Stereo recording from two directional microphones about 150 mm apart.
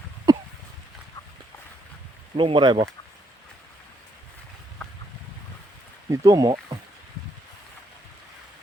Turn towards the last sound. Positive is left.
turn(degrees=-25)  # may be behind; listen again after turning